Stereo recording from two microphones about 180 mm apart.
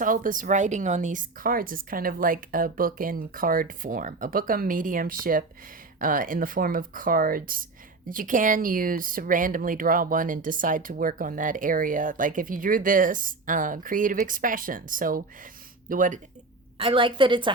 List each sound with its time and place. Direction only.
0.0 s speech: 50° right (ahead or behind)
16.7 s a woman's voice: 30° right (ahead or behind)